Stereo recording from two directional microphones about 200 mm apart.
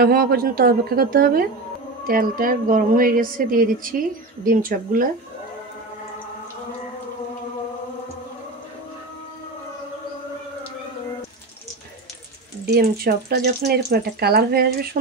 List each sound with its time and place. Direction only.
0.0 s a woman's voice: 50° right (ahead or behind)
12.6 s a woman's voice: 50° right (ahead or behind)